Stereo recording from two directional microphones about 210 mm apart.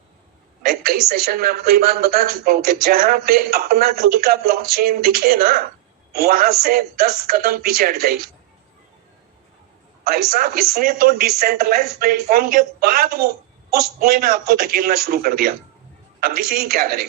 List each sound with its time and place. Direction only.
0.6 s a woman's voice: 45° right (ahead or behind)
10.0 s a woman's voice: 45° right (ahead or behind)